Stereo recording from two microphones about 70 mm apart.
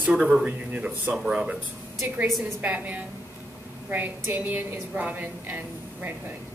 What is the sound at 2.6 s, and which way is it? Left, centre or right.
A woman's voice, centre.